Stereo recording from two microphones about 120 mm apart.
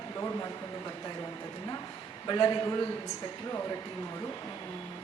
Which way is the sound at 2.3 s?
35° left (ahead or behind).